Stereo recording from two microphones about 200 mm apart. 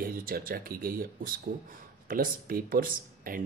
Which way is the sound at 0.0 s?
45° right (ahead or behind).